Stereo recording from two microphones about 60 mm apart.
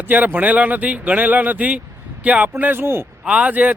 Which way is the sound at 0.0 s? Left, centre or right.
Right.